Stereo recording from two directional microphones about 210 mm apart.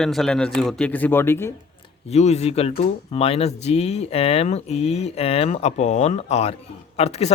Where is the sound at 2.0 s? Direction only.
30° left (ahead or behind).